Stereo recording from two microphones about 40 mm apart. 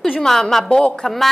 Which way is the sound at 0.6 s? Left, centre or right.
Left.